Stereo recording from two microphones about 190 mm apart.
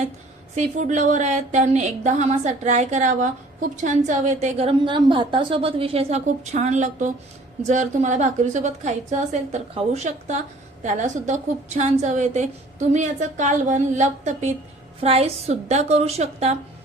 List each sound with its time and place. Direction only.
0.5 s speech: 40° right (ahead or behind)